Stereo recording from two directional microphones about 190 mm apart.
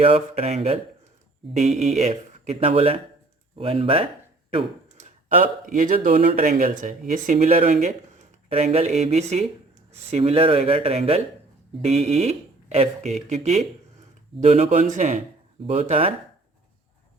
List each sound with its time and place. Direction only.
0.0 s speech: 30° right (ahead or behind)
4.9 s speech: 40° right (ahead or behind)